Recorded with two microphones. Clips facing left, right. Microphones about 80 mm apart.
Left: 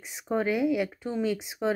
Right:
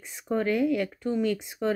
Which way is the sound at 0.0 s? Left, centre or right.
Centre.